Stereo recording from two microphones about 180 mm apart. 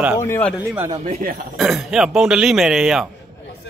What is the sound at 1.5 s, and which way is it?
Speech, centre (ahead or behind).